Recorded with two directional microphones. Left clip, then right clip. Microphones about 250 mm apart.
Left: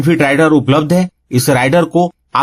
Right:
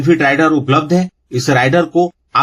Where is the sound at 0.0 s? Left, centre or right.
Left.